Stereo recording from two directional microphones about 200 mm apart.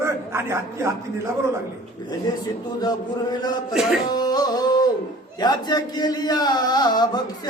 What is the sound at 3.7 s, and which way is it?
Speech, centre (ahead or behind).